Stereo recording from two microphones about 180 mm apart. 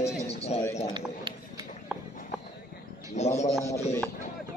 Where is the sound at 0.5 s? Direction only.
35° left (ahead or behind).